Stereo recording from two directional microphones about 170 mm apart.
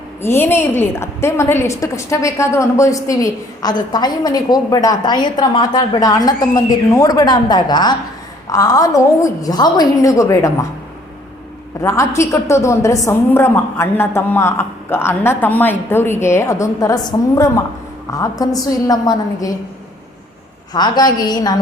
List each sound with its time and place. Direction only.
0.2 s a woman's voice: 15° left (ahead or behind)
11.8 s a woman's voice: 15° left (ahead or behind)
20.7 s a woman's voice: 25° left (ahead or behind)